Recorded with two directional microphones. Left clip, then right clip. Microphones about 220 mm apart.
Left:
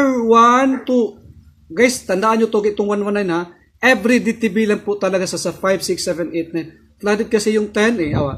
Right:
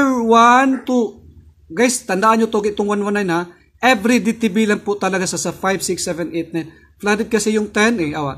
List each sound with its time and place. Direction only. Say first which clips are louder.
0.0 s speech: even; 20° right (ahead or behind)